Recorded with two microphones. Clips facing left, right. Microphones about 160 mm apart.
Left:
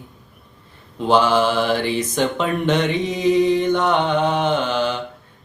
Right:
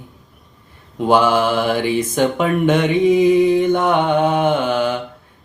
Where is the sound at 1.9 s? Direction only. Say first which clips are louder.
Right 3 dB; 50° right (ahead or behind).